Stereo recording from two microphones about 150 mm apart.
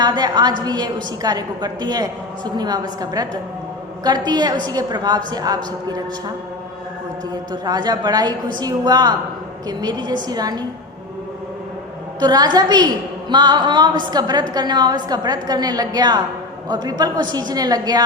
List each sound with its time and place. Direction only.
0.0 s a woman's voice: 30° right (ahead or behind)
7.5 s a woman's voice: 30° right (ahead or behind)
12.2 s a woman's voice: 30° right (ahead or behind)